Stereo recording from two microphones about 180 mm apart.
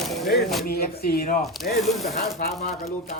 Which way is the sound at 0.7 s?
60° left (ahead or behind).